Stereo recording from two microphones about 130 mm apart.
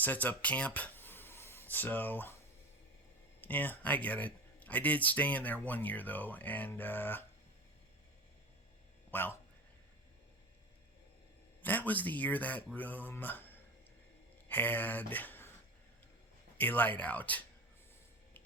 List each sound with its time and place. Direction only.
0.0 s speech: 15° left (ahead or behind)
3.4 s speech: 15° left (ahead or behind)
9.0 s speech: 15° left (ahead or behind)
11.6 s speech: 15° left (ahead or behind)
16.6 s speech: 15° left (ahead or behind)